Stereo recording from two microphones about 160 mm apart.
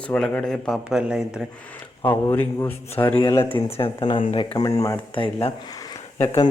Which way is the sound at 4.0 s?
30° left (ahead or behind).